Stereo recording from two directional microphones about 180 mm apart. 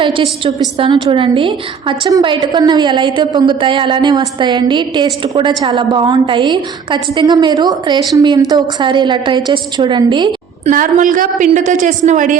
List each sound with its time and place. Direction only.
0.0 s a woman's voice: 30° right (ahead or behind)
10.7 s a woman's voice: 45° right (ahead or behind)